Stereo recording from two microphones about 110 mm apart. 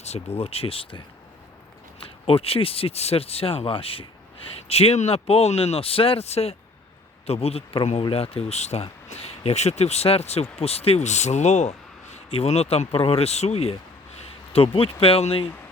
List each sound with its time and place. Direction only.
0.0 s speech: 75° left (ahead or behind); by 1.0 s 55° left (ahead or behind)
2.2 s speech: 60° left (ahead or behind)
4.7 s speech: 70° left (ahead or behind); by 11.7 s 90° left
12.1 s speech: 75° left (ahead or behind)
14.5 s speech: 60° left (ahead or behind)